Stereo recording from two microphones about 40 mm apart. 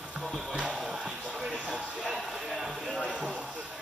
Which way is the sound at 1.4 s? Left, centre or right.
Centre.